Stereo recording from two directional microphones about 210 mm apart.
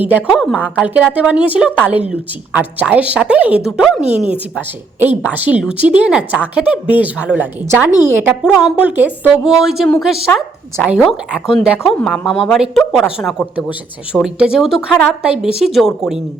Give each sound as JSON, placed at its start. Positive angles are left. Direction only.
{"t": 0.0, "sound": "a woman's voice", "side_deg": -5}
{"t": 0.3, "sound": "a woman's voice", "side_deg": 5}
{"t": 1.0, "sound": "a woman's voice", "side_deg": -5}